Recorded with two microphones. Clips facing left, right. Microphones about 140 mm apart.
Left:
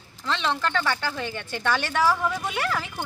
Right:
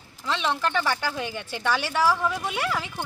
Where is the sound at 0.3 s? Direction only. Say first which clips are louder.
Even; 5° right (ahead or behind).